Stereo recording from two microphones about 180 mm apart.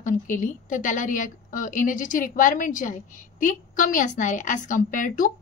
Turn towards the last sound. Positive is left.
turn(degrees=50)  # may be behind; listen again after turning